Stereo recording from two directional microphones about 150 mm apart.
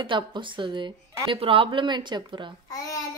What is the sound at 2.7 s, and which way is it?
Speech, 20° left (ahead or behind).